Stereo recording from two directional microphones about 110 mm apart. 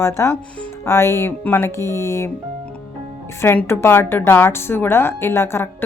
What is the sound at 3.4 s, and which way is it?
Speech, 20° left (ahead or behind).